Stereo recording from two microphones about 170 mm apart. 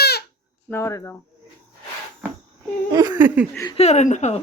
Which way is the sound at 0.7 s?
15° left (ahead or behind).